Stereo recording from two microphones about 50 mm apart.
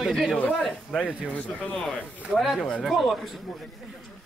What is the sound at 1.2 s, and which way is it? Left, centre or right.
Speech, left.